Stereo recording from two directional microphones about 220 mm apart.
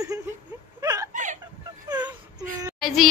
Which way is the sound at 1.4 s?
20° right (ahead or behind).